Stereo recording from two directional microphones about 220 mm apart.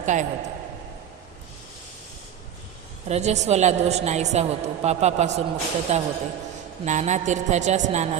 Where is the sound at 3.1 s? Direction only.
30° right (ahead or behind).